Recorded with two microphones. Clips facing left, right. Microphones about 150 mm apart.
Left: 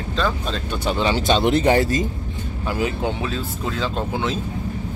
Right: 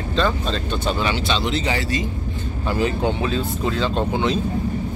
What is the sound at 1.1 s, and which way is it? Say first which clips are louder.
Speech: left 5 dB; 50° left (ahead or behind).